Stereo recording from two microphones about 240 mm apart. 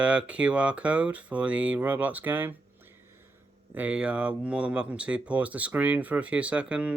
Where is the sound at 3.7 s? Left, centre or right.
Centre.